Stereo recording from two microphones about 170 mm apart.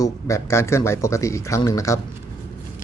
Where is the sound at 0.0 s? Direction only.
15° left (ahead or behind).